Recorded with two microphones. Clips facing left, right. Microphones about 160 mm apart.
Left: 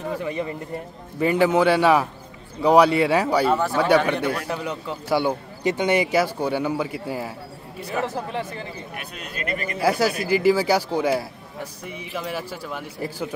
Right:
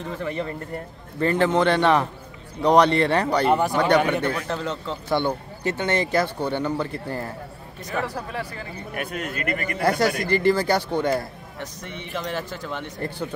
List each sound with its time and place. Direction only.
0.2 s a man's voice: 15° left (ahead or behind)
8.3 s speech: 20° left (ahead or behind)
8.9 s speech: 50° right (ahead or behind)
9.8 s a man's voice: 5° left (ahead or behind)